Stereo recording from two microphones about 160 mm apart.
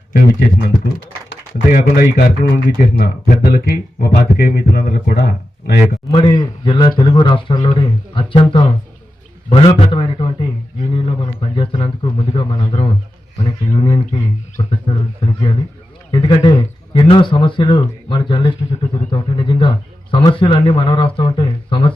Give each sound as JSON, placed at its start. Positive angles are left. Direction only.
{"t": 0.1, "sound": "speech", "side_deg": 60}
{"t": 1.7, "sound": "speech", "side_deg": 65}
{"t": 6.1, "sound": "a man's voice", "side_deg": 30}